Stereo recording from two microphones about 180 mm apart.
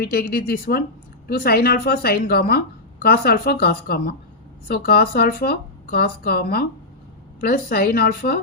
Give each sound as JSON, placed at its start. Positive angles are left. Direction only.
{"t": 0.0, "sound": "a woman's voice", "side_deg": 55}